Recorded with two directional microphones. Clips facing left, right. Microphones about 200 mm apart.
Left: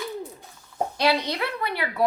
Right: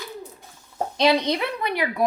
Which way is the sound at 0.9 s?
20° right (ahead or behind).